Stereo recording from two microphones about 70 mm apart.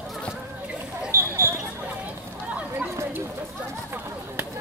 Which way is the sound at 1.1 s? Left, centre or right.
Right.